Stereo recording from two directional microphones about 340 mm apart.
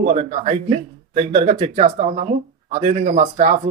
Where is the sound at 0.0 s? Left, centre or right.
Centre.